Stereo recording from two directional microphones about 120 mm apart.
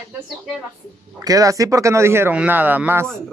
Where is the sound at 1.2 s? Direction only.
30° right (ahead or behind).